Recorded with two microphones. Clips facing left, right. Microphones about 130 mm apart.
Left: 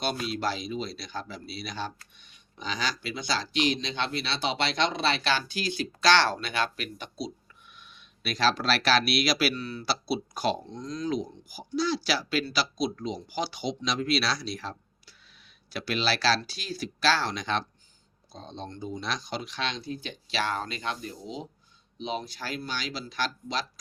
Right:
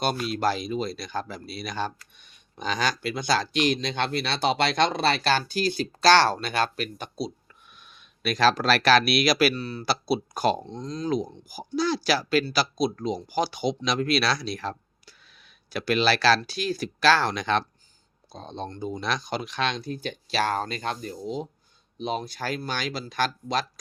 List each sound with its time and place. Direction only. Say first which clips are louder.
0.0 s speech: right 4 dB; 45° right (ahead or behind)
9.6 s speech: right 3 dB; 35° right (ahead or behind)
9.8 s speech: right 5 dB; 50° right (ahead or behind)
10.7 s speech: right 3 dB; 30° right (ahead or behind); by 23.6 s 50° right (ahead or behind)